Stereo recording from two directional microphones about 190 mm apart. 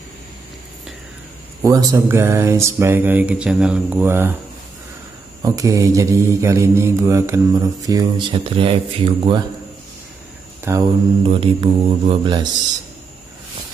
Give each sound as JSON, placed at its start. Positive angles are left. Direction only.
{"t": 1.6, "sound": "mantra", "side_deg": -15}
{"t": 5.4, "sound": "mantra", "side_deg": -15}
{"t": 10.7, "sound": "mantra", "side_deg": -15}
{"t": 11.2, "sound": "mantra", "side_deg": -30}